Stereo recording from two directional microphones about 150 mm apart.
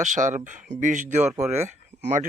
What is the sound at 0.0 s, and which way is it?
Speech, 55° right (ahead or behind).